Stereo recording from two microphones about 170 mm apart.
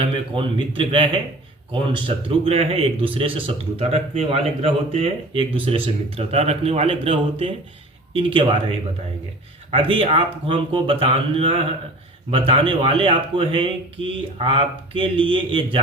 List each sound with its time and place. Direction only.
0.0 s speech: 30° right (ahead or behind)
9.7 s speech: 30° right (ahead or behind)